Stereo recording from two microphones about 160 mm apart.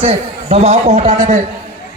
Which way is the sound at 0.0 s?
40° right (ahead or behind).